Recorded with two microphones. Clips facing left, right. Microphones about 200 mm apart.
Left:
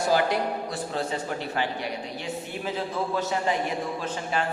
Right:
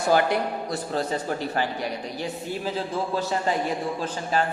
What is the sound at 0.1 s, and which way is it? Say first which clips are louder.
Speech: right 3 dB; 55° right (ahead or behind).